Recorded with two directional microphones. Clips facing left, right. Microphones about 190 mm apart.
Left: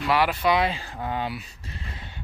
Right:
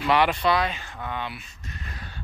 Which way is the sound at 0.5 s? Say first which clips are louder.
Left 1 dB; 25° left (ahead or behind).